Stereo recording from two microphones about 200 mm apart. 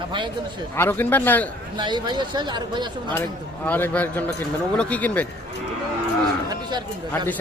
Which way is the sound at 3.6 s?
5° left (ahead or behind).